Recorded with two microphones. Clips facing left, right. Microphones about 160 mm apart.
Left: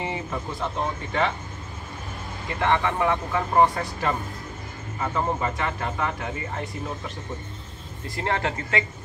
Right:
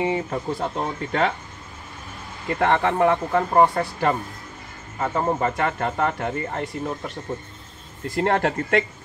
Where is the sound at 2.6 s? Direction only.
50° right (ahead or behind).